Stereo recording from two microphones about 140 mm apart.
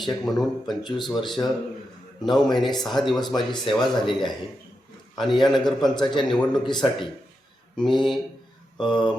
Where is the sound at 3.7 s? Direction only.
40° left (ahead or behind).